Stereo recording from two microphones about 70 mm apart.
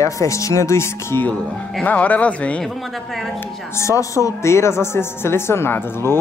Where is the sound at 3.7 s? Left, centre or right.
Left.